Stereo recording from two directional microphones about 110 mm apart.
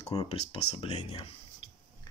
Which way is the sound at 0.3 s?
70° left (ahead or behind).